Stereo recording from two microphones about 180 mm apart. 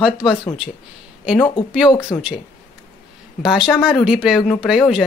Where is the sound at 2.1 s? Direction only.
20° left (ahead or behind).